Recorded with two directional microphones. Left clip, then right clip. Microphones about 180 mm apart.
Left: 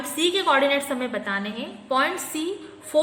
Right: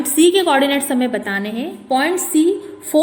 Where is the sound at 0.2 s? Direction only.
30° right (ahead or behind).